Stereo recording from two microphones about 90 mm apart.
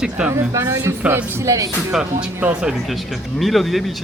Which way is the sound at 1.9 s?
10° right (ahead or behind).